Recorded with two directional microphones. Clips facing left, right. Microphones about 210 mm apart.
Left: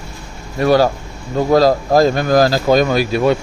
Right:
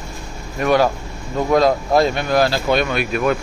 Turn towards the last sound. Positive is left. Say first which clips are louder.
# left 4 dB
turn(degrees=30)  # may be behind; listen again after turning